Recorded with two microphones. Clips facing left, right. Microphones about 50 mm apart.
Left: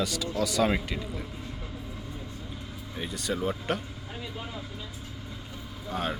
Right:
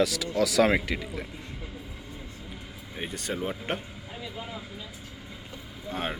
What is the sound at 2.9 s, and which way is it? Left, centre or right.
Speech, right.